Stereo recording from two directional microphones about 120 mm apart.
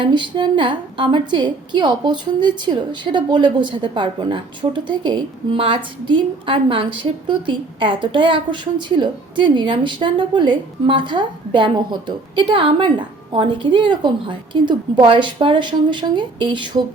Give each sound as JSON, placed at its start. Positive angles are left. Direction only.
{"t": 0.0, "sound": "a woman's voice", "side_deg": -40}